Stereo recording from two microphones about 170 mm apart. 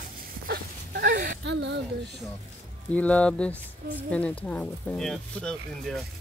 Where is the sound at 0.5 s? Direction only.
60° right (ahead or behind).